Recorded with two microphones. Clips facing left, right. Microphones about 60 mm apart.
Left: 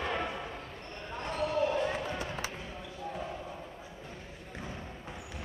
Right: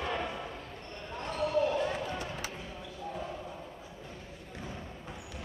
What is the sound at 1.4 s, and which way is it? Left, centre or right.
Basketball bounce, centre.